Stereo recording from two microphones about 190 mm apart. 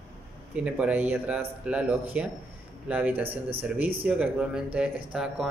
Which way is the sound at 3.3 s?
30° right (ahead or behind).